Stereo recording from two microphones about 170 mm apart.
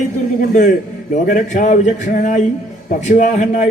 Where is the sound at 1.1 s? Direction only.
50° left (ahead or behind).